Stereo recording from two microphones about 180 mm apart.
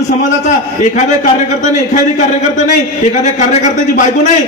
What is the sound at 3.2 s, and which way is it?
Speech, 45° left (ahead or behind).